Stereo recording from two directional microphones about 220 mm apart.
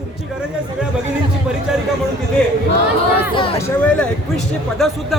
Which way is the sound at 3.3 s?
20° left (ahead or behind).